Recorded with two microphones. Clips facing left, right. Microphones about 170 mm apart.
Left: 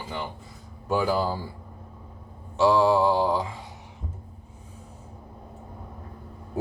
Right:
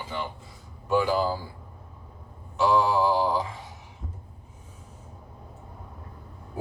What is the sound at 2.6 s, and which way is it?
Mantra, 30° left (ahead or behind).